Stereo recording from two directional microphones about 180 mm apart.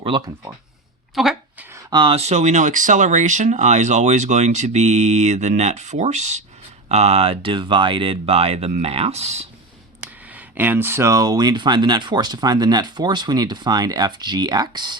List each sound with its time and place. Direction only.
0.0 s speech: 30° right (ahead or behind)
1.1 s a sound: centre (ahead or behind)
1.7 s speech: 25° right (ahead or behind)
10.0 s speech: 10° right (ahead or behind)